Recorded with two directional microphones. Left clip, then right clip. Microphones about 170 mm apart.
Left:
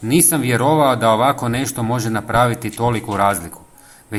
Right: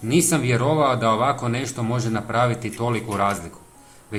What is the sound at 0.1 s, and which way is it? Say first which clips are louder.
Speech: left 3 dB; 35° left (ahead or behind).